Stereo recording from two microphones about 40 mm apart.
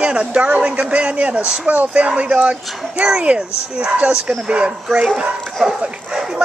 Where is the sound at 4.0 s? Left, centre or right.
Right.